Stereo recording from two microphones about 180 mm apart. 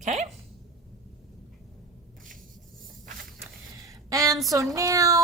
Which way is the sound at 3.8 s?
20° right (ahead or behind).